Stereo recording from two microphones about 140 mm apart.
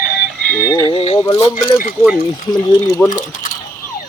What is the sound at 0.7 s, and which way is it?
Speech, 25° left (ahead or behind).